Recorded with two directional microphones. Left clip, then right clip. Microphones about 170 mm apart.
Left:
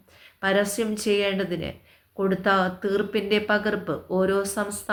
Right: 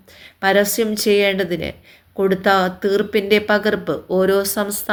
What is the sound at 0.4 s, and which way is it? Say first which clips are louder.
Speech: right 7 dB; 40° right (ahead or behind).